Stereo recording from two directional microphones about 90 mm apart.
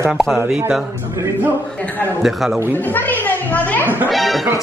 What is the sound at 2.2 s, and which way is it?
Speech, 5° right (ahead or behind).